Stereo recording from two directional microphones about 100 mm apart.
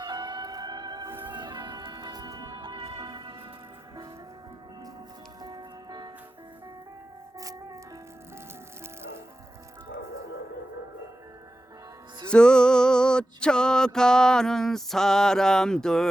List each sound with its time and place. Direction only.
0.0 s music: 45° right (ahead or behind)
5.4 s music: 40° right (ahead or behind)
12.3 s a sound: 10° left (ahead or behind)